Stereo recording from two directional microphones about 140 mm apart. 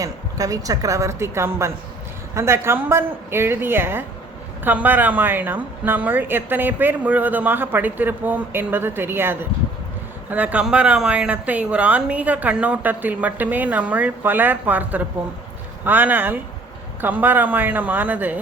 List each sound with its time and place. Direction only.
0.0 s a woman's voice: 25° right (ahead or behind)